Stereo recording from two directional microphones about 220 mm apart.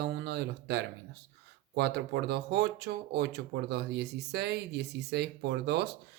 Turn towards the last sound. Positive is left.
turn(degrees=-50)  # may be behind; listen again after turning